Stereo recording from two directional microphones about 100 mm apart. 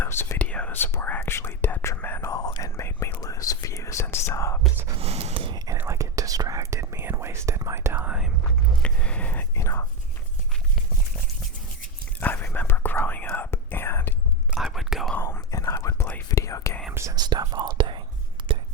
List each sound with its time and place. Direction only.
0.0 s whispering: 25° left (ahead or behind)
0.3 s whispering: 15° left (ahead or behind)
2.3 s whispering: 35° left (ahead or behind)
4.9 s snort: 85° right
5.7 s whispering: 20° right (ahead or behind)
6.0 s whispering: 35° right (ahead or behind)
7.9 s whispering: 10° right (ahead or behind)
8.8 s whispering: 10° left (ahead or behind); by 9.8 s 25° left (ahead or behind)
12.2 s whispering: 15° left (ahead or behind)
14.5 s whispering: 5° right (ahead or behind)
15.2 s whispering: 30° left (ahead or behind)
16.9 s whispering: 30° right (ahead or behind)
17.2 s whispering: 40° right (ahead or behind)